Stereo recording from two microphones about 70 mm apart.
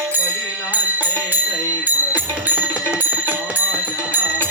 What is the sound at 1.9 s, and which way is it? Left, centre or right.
Music, right.